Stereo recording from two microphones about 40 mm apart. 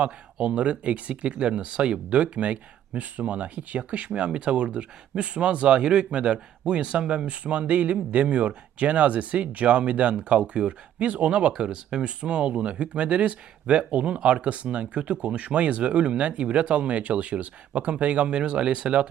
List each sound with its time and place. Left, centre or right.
0.4 s speech: right